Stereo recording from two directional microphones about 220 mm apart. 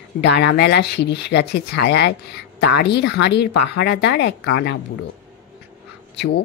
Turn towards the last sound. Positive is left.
turn(degrees=50)  # may be behind; listen again after turning